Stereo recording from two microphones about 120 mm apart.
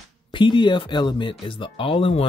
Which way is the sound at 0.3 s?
40° left (ahead or behind).